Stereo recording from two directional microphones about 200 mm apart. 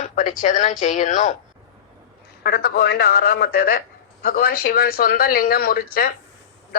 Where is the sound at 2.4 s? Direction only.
50° left (ahead or behind).